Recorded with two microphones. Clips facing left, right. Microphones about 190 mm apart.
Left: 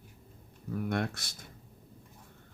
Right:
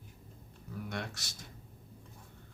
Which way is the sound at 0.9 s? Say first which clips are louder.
Left 8 dB; 55° left (ahead or behind).